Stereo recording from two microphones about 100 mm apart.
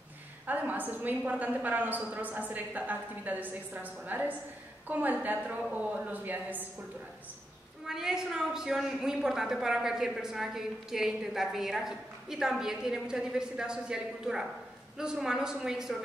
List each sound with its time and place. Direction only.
0.5 s a woman's voice: 15° right (ahead or behind)
7.8 s a woman's voice: 5° right (ahead or behind)